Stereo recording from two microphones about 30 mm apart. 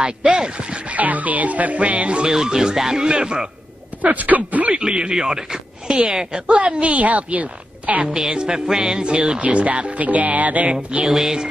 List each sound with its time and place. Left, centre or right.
0.0 s speech: right
0.9 s music: right
2.2 s speech: right
4.0 s music: right
4.7 s speech: right
5.1 s speech: right
6.4 s a woman's voice: right
8.3 s speech: right
9.4 s a woman's voice: right
10.0 s music: right
10.7 s speech: right
11.1 s speech: centre